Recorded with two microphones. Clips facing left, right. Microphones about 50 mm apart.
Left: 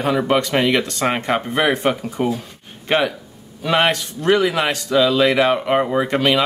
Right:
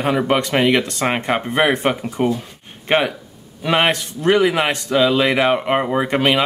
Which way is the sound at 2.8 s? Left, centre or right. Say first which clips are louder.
Right 1 dB; right.